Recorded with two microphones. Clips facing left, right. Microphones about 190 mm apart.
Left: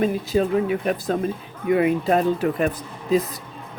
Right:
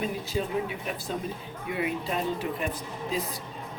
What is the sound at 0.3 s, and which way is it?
Speech, 65° left (ahead or behind).